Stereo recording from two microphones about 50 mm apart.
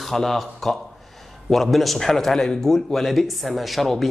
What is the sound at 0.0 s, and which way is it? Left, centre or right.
Speech, centre.